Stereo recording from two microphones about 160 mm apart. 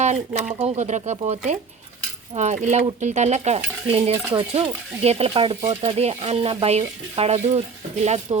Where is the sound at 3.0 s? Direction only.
45° right (ahead or behind).